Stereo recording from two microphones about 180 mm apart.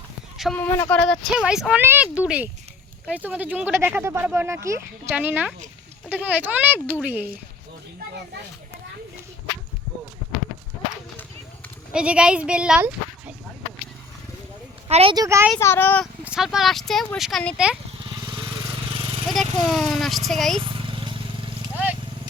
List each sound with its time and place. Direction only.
0.6 s speech: 10° left (ahead or behind); by 7.3 s 10° right (ahead or behind)
11.9 s speech: 5° right (ahead or behind)
14.8 s speech: 35° right (ahead or behind)
15.1 s speech: 15° right (ahead or behind)
15.5 s speech: 15° left (ahead or behind)
16.2 s speech: 5° right (ahead or behind)
19.3 s speech: centre (ahead or behind)
20.6 s vehicle: 30° right (ahead or behind)